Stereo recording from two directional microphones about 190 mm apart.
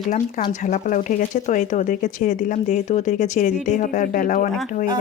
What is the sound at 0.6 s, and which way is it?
Speech, 40° left (ahead or behind).